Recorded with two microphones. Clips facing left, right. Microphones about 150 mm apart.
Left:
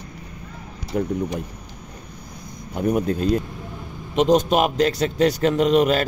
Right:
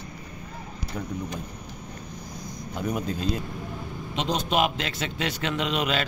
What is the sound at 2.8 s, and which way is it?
A man's voice, 55° left (ahead or behind).